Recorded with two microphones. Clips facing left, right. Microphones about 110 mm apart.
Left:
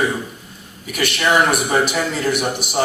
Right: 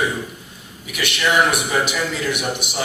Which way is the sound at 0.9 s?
40° left (ahead or behind).